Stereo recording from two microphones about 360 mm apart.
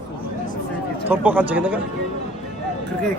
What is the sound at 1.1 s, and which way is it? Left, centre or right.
Speech, centre.